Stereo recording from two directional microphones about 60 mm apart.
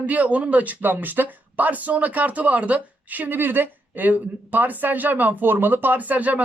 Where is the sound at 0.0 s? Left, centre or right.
Right.